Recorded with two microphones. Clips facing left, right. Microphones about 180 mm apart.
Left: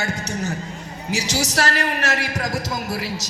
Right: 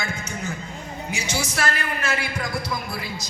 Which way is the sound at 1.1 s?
80° left.